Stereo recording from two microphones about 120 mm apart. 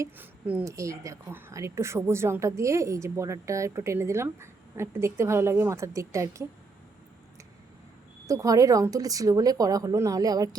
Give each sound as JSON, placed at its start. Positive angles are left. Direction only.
{"t": 0.0, "sound": "speech", "side_deg": -15}
{"t": 0.6, "sound": "a woman's voice", "side_deg": -25}
{"t": 8.3, "sound": "a woman's voice", "side_deg": -30}